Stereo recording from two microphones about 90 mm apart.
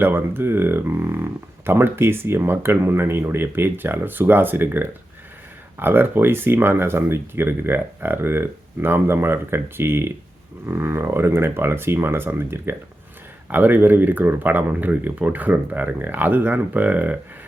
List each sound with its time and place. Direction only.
0.0 s speech: 25° right (ahead or behind)